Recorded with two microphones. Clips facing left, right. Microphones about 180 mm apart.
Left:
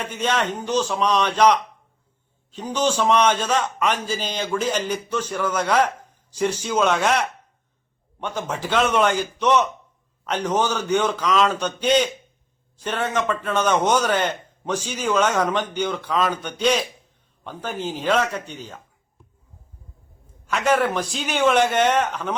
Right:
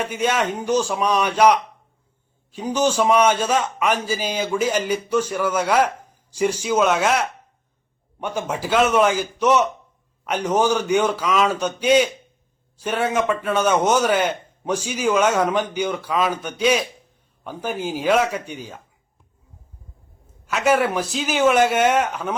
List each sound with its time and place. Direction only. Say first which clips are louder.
0.0 s a man's voice: right 2 dB; 10° right (ahead or behind)
20.5 s a man's voice: right 1 dB; 5° right (ahead or behind)